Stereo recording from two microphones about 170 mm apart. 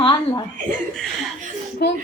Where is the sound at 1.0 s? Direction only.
Centre (ahead or behind).